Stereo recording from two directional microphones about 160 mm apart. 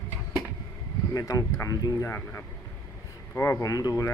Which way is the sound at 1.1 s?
20° left (ahead or behind).